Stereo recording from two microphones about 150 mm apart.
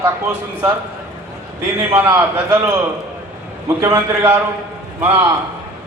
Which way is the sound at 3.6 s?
20° right (ahead or behind).